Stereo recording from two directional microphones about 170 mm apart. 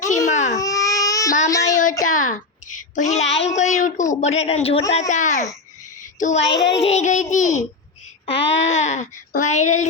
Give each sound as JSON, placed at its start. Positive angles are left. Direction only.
{"t": 0.3, "sound": "baby cry", "side_deg": 45}
{"t": 0.5, "sound": "baby cry", "side_deg": 20}
{"t": 1.5, "sound": "child singing", "side_deg": 20}
{"t": 2.0, "sound": "a woman's voice", "side_deg": 50}
{"t": 6.0, "sound": "child singing", "side_deg": 45}
{"t": 6.7, "sound": "speech", "side_deg": 40}